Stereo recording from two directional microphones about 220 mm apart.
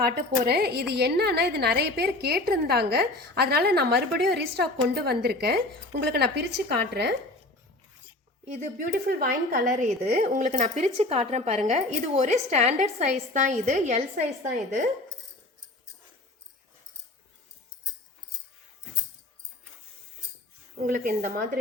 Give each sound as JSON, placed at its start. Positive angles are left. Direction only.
{"t": 0.0, "sound": "a woman's voice", "side_deg": -45}
{"t": 8.9, "sound": "a woman's voice", "side_deg": -45}
{"t": 20.8, "sound": "a woman's voice", "side_deg": -35}